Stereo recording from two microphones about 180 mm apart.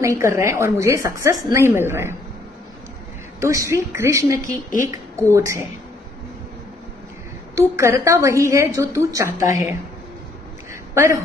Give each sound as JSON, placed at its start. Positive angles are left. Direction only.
{"t": 0.0, "sound": "a woman's voice", "side_deg": -15}
{"t": 3.3, "sound": "a woman's voice", "side_deg": -15}
{"t": 7.5, "sound": "a woman's voice", "side_deg": -15}
{"t": 10.7, "sound": "a sound", "side_deg": -15}